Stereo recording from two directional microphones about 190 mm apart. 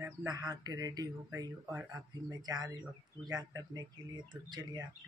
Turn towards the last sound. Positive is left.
turn(degrees=-20)  # may be behind; listen again after turning